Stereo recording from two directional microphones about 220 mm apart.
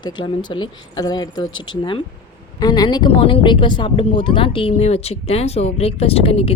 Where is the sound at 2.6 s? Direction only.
15° left (ahead or behind).